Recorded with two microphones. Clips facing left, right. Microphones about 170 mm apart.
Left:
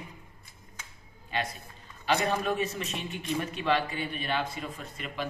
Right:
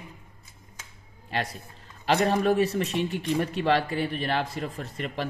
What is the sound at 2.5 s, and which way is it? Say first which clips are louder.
Speech: right 7 dB; 70° right (ahead or behind).